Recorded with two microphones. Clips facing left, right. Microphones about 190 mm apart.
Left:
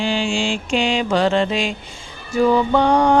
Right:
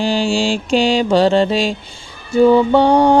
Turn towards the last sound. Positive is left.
turn(degrees=-30)  # may be behind; listen again after turning